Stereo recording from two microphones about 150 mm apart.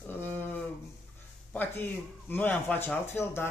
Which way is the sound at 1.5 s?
10° left (ahead or behind).